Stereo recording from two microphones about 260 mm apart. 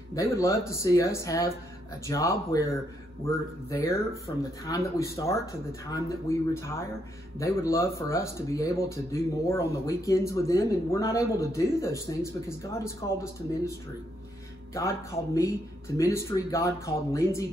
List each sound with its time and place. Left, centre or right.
0.1 s speech: centre
3.7 s speech: centre